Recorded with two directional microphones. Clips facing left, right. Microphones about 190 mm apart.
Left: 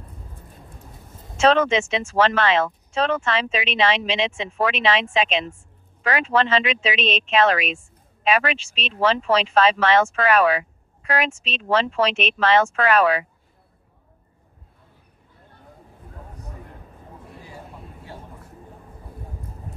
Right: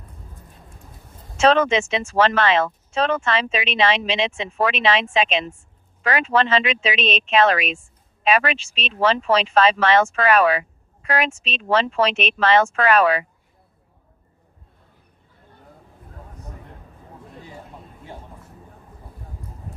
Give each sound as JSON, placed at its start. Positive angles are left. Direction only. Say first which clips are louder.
{"t": 1.4, "sound": "speech", "louder": "right 1 dB", "side_deg": -55}